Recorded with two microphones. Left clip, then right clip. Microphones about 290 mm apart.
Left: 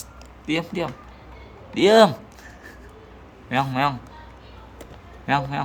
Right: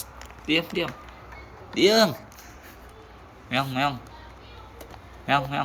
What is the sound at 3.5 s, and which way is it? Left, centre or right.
Speech, centre.